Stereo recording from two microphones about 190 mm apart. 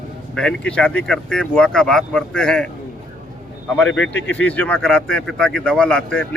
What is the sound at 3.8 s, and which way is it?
Speech, 5° left (ahead or behind).